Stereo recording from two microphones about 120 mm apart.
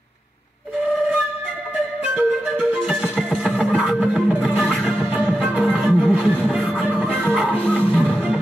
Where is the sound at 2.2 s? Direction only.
10° right (ahead or behind).